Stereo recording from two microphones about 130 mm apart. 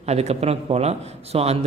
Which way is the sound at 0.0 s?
55° right (ahead or behind).